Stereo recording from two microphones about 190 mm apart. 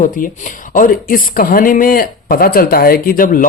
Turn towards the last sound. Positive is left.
turn(degrees=45)  # may be behind; listen again after turning